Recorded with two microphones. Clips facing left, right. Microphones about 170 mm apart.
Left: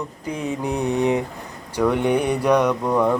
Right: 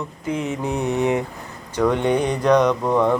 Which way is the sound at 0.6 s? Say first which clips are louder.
Left 1 dB; 15° left (ahead or behind).